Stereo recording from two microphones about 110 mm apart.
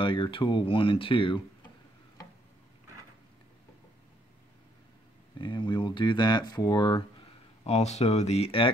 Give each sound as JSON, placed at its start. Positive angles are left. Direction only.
{"t": 0.0, "sound": "speech", "side_deg": 50}
{"t": 5.4, "sound": "speech", "side_deg": 45}
{"t": 7.6, "sound": "speech", "side_deg": 85}